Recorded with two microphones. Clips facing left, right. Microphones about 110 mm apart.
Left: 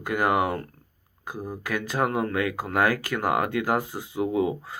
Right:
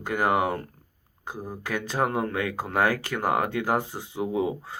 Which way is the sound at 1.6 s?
30° right (ahead or behind).